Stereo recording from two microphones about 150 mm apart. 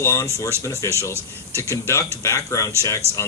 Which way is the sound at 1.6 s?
15° left (ahead or behind).